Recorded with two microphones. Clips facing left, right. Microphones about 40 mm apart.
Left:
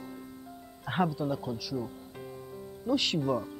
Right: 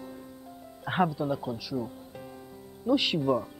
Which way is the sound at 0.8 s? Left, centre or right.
Centre.